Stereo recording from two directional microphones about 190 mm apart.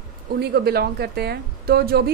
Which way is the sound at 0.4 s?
55° right (ahead or behind).